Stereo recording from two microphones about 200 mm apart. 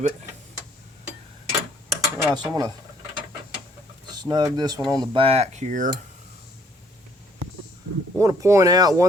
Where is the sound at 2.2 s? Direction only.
20° right (ahead or behind).